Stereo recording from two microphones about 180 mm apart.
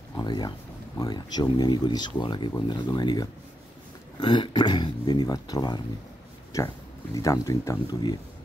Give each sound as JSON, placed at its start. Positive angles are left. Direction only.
{"t": 0.2, "sound": "speech", "side_deg": 25}